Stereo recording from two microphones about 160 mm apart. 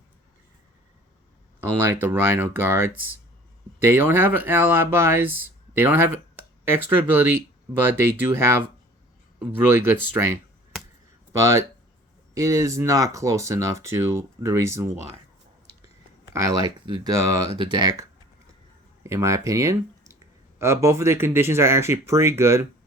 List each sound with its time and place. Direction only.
1.9 s speech: 10° right (ahead or behind)
16.3 s speech: 20° right (ahead or behind)